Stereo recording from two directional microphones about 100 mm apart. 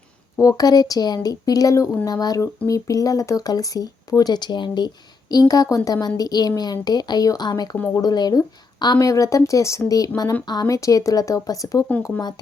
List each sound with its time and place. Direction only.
0.3 s speech: 35° left (ahead or behind)
5.3 s speech: 40° left (ahead or behind)
10.4 s speech: 45° left (ahead or behind)